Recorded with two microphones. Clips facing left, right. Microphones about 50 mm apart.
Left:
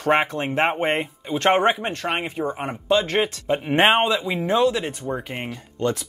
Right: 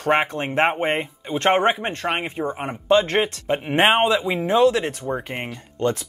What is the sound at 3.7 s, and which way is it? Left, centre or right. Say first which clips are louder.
Speech: even; centre.